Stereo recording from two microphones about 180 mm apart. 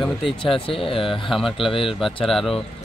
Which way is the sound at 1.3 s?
Centre (ahead or behind).